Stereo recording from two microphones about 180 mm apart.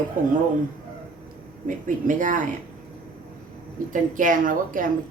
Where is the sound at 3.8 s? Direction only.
45° right (ahead or behind).